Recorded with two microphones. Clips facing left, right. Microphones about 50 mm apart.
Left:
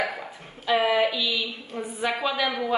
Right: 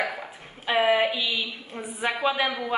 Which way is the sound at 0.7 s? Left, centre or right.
Centre.